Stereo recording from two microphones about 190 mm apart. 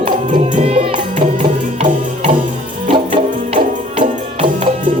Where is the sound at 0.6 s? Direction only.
30° right (ahead or behind).